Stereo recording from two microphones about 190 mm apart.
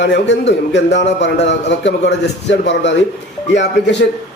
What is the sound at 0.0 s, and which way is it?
A man's voice, 65° left (ahead or behind).